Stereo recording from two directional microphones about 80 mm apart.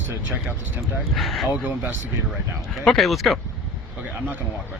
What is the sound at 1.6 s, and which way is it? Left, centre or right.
Speech, right.